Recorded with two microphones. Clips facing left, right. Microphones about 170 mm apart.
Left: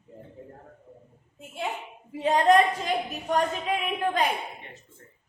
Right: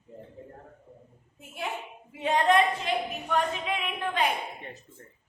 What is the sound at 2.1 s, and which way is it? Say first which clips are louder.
A woman's voice: left 3 dB; 35° left (ahead or behind).